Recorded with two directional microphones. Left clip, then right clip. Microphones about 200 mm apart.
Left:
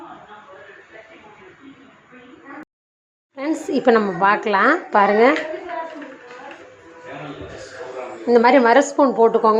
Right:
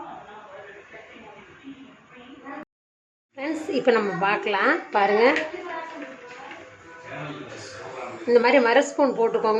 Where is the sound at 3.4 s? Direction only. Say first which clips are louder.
Left 4 dB; 20° left (ahead or behind).